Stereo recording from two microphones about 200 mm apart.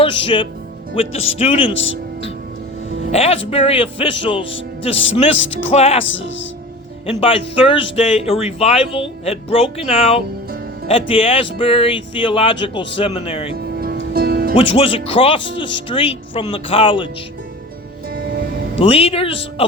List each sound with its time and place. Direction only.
0.0 s speech: 25° left (ahead or behind)
3.1 s speech: 30° left (ahead or behind)
6.1 s speech: 70° left (ahead or behind)
7.1 s speech: 30° left (ahead or behind)
13.6 s music: 50° right (ahead or behind)
14.5 s speech: 25° left (ahead or behind)
18.8 s speech: 30° left (ahead or behind)